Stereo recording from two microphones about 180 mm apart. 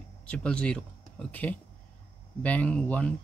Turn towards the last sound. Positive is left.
turn(degrees=5)  # may be behind; listen again after turning